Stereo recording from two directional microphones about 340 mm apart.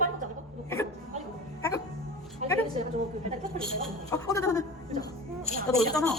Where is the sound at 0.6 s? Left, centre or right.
Centre.